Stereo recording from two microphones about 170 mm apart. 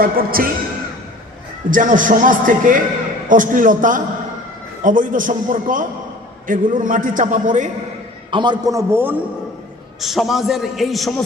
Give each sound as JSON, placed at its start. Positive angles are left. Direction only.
{"t": 0.0, "sound": "a man's voice", "side_deg": -60}
{"t": 1.7, "sound": "a man's voice", "side_deg": -50}
{"t": 8.3, "sound": "a man's voice", "side_deg": -25}
{"t": 10.0, "sound": "a man's voice", "side_deg": 0}